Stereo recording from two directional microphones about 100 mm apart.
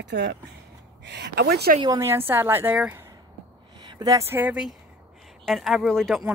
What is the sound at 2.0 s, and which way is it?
Speech, 25° right (ahead or behind).